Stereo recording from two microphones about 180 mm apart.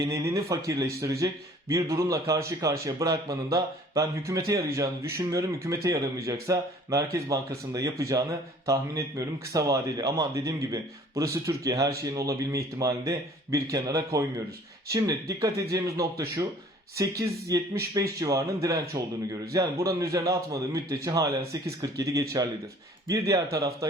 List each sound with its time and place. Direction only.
0.0 s speech: 15° right (ahead or behind)